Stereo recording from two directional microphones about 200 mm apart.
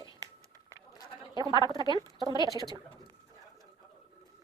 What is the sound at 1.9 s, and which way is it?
Speech, 20° right (ahead or behind).